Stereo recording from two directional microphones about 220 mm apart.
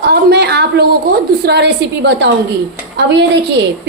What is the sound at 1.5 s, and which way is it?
A woman's voice, 50° right (ahead or behind).